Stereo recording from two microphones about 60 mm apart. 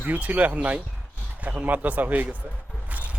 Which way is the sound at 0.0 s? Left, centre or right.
Right.